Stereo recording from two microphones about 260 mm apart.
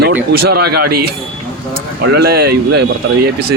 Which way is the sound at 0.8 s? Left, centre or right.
Right.